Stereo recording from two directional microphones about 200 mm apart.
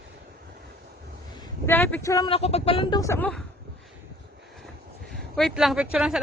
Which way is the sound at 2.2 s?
30° left (ahead or behind).